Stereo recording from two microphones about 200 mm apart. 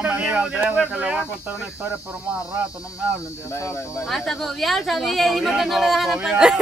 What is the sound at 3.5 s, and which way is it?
Speech, 15° left (ahead or behind).